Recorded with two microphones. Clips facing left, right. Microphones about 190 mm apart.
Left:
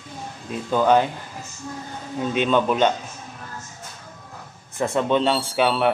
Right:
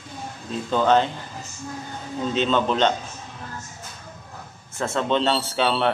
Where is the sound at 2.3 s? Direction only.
15° left (ahead or behind).